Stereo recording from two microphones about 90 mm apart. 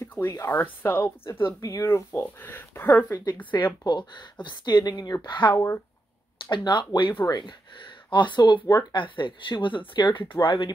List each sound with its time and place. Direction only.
0.2 s speech: 35° left (ahead or behind)
1.6 s speech: 35° left (ahead or behind)
2.1 s speech: 20° left (ahead or behind)
3.5 s speech: 55° left (ahead or behind)